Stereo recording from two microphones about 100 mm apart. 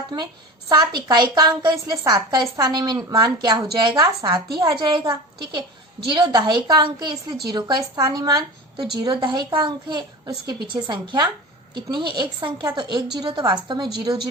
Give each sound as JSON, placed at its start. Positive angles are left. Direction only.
{"t": 0.7, "sound": "a woman's voice", "side_deg": -45}